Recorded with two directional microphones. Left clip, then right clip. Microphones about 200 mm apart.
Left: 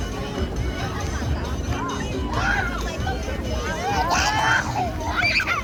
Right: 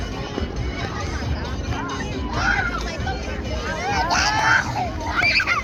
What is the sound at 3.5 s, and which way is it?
Vehicle, 55° left (ahead or behind).